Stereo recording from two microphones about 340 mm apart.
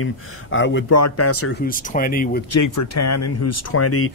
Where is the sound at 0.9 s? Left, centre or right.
Left.